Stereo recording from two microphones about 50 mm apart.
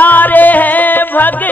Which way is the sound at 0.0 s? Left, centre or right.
Left.